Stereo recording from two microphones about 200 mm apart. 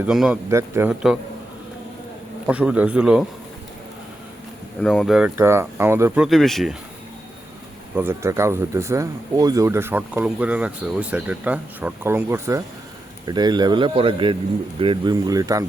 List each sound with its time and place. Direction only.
0.0 s speech: 5° right (ahead or behind)
2.5 s speech: 5° right (ahead or behind)
4.8 s speech: centre (ahead or behind)
7.9 s speech: 10° right (ahead or behind)